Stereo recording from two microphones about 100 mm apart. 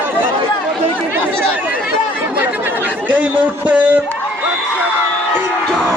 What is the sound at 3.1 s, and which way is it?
Speech, 15° right (ahead or behind).